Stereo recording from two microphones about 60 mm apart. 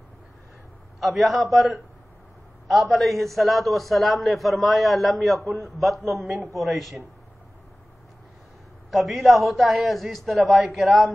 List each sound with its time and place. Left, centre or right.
0.9 s a man's voice: centre
8.9 s a man's voice: centre